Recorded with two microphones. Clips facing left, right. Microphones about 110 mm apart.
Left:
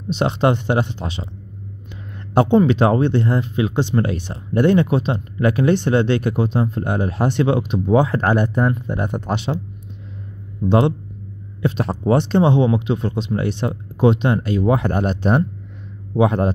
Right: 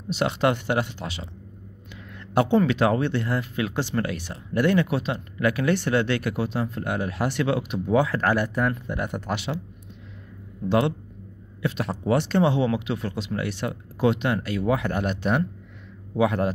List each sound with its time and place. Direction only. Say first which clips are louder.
0.1 s speech: left 5 dB; 25° left (ahead or behind)
2.3 s speech: left 6 dB; 25° left (ahead or behind)
10.7 s speech: left 5 dB; 25° left (ahead or behind)